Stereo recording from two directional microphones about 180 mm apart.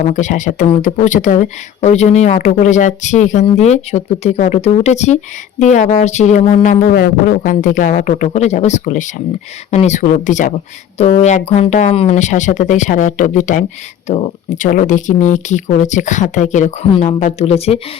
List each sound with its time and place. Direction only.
0.1 s speech: 45° left (ahead or behind)